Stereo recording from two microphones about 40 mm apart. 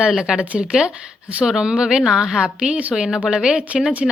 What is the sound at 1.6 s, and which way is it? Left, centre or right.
Speech, right.